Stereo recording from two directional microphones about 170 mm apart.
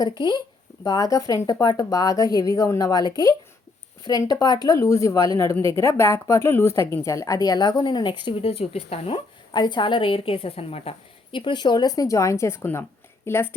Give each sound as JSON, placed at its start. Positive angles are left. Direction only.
{"t": 0.2, "sound": "a woman's voice", "side_deg": 25}